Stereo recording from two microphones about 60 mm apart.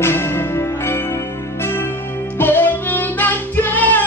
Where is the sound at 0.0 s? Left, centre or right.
Left.